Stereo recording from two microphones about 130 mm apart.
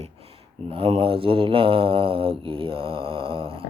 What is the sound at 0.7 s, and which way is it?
Mantra, 45° right (ahead or behind).